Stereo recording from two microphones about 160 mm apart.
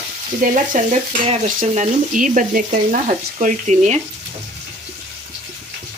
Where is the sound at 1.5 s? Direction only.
50° right (ahead or behind).